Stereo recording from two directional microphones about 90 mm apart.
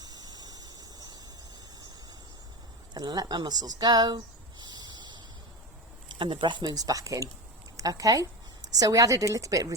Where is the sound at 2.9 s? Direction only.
50° right (ahead or behind).